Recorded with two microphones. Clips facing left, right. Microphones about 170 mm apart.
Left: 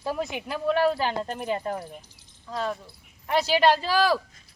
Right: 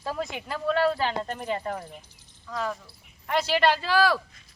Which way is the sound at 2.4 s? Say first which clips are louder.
Left 1 dB; 30° left (ahead or behind).